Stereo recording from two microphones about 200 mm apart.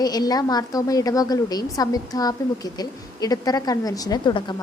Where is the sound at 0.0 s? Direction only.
20° left (ahead or behind).